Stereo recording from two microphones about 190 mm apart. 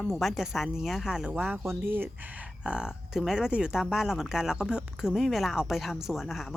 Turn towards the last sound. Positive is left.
turn(degrees=0)  # may be behind; listen again after turning